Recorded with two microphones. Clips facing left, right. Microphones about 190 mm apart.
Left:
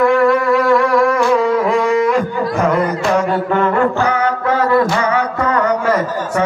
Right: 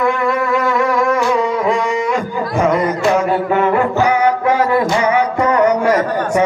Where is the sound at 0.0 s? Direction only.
Centre (ahead or behind).